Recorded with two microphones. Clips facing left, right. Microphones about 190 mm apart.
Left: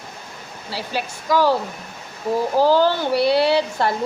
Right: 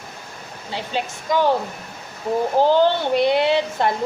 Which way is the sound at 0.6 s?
20° right (ahead or behind).